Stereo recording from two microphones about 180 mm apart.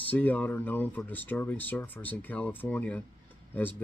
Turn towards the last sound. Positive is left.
turn(degrees=10)  # may be behind; listen again after turning